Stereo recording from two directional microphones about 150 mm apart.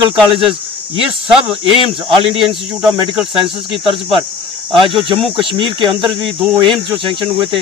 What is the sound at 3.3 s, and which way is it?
Speech, 35° right (ahead or behind).